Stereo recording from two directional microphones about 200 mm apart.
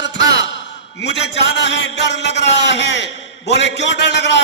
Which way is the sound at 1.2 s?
60° left (ahead or behind).